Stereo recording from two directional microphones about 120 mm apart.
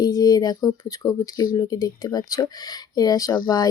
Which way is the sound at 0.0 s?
35° left (ahead or behind).